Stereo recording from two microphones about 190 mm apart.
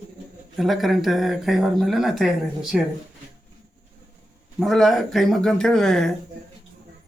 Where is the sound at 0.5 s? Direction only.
Centre (ahead or behind).